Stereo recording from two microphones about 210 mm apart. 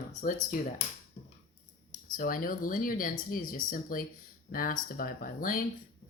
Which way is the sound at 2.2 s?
40° left (ahead or behind).